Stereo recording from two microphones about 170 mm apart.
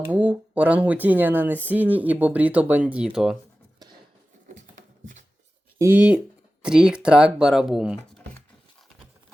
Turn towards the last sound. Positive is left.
turn(degrees=-5)  # may be behind; listen again after turning